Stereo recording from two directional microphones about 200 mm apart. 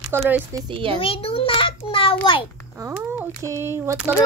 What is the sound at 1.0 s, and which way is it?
A child's voice, 25° left (ahead or behind).